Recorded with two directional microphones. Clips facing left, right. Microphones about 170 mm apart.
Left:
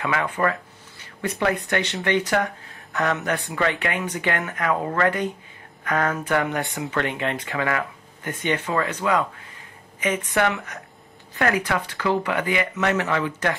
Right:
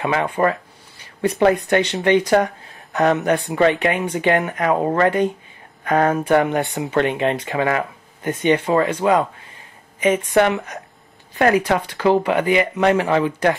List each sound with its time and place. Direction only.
0.0 s speech: 25° right (ahead or behind)
1.7 s speech: 20° right (ahead or behind)